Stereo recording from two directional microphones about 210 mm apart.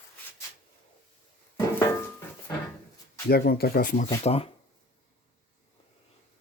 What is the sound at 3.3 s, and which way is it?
Speech, 45° left (ahead or behind).